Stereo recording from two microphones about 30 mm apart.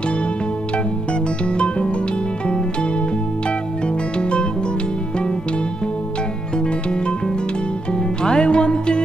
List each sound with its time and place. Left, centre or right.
8.2 s music: left